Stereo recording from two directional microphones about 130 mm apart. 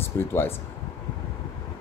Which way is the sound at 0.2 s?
15° left (ahead or behind).